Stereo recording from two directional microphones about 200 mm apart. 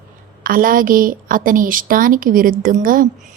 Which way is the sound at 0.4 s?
45° right (ahead or behind).